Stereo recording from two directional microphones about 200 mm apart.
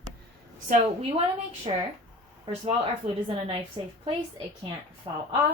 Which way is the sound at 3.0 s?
20° right (ahead or behind).